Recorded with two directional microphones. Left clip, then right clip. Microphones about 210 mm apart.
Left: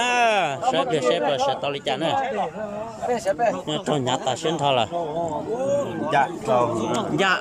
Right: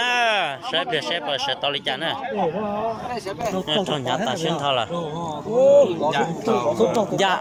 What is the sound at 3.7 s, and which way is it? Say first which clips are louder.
Speech: right 1 dB; 15° left (ahead or behind).